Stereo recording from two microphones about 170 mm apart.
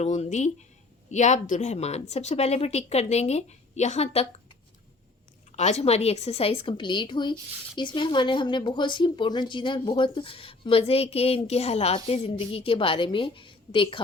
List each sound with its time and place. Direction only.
0.0 s speech: 40° left (ahead or behind)